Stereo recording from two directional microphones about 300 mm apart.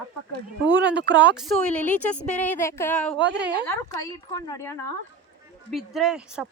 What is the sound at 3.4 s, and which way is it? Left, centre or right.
Speech, right.